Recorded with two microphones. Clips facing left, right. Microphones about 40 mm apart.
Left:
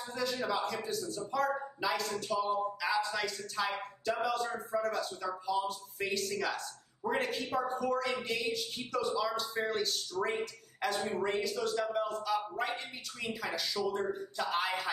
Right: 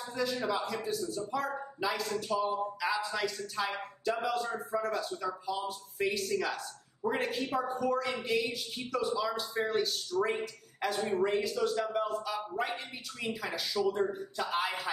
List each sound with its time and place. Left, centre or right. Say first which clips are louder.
0.1 s speech: right 2 dB; centre